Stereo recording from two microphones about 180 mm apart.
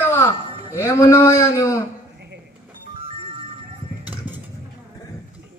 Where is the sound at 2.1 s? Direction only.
70° right (ahead or behind).